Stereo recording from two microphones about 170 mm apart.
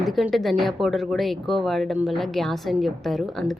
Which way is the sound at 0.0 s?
Centre (ahead or behind).